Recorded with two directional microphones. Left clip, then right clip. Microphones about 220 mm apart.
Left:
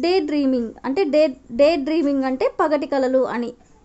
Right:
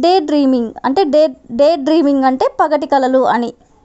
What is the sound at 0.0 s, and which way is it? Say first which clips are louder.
Speech: right 8 dB; 25° right (ahead or behind).